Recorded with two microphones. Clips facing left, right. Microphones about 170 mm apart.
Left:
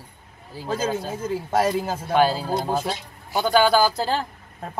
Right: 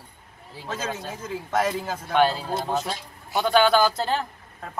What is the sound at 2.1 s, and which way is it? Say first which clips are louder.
Speech: left 1 dB; 5° left (ahead or behind).